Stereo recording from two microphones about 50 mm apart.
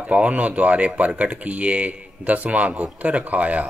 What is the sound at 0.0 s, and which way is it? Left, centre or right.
A man's voice, right.